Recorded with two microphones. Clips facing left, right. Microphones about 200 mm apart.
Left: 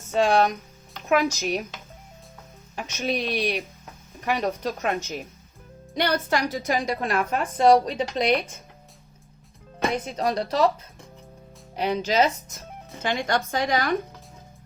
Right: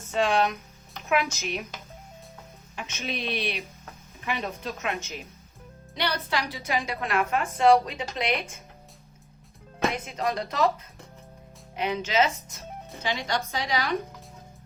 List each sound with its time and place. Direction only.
0.1 s a woman's voice: 45° left (ahead or behind)
2.7 s a woman's voice: 40° left (ahead or behind)
9.9 s a woman's voice: 35° left (ahead or behind)
11.8 s a woman's voice: 35° left (ahead or behind)
13.0 s a woman's voice: 50° left (ahead or behind)